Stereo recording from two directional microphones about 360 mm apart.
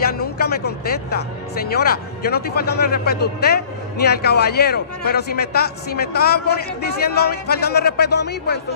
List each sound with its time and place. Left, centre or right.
0.0 s a man's voice: left